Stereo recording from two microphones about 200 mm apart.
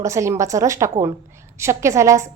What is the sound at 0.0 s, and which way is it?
A woman's voice, 15° right (ahead or behind).